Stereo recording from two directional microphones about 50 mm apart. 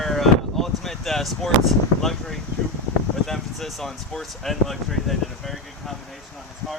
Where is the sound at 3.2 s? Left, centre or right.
Centre.